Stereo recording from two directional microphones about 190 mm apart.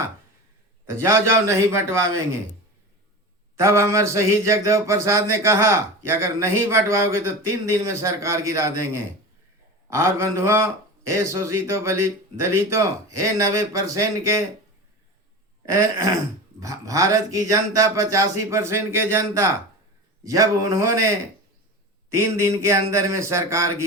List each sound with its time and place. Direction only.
1.0 s a man's voice: 15° right (ahead or behind)
3.6 s a man's voice: 15° right (ahead or behind)
15.7 s a man's voice: 15° right (ahead or behind)
22.1 s a man's voice: 15° right (ahead or behind)